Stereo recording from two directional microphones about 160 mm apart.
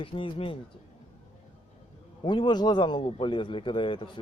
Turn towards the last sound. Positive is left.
turn(degrees=30)  # may be behind; listen again after turning